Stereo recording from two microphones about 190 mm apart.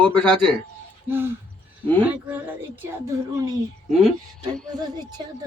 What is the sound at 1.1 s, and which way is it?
A woman's voice, 10° right (ahead or behind).